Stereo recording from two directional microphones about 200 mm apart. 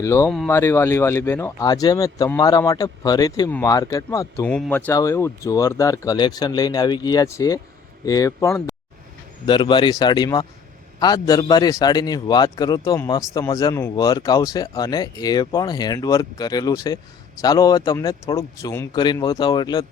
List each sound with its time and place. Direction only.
0.0 s speech: 15° left (ahead or behind)